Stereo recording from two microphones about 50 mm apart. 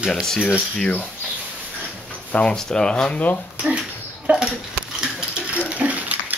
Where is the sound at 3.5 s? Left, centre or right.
Right.